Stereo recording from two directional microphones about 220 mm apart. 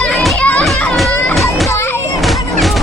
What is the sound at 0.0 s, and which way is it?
Music, centre (ahead or behind).